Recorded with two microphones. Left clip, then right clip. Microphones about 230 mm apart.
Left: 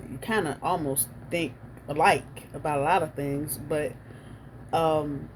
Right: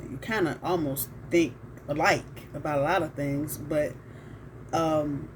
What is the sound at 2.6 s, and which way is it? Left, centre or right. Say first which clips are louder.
Speech: left 2 dB; left.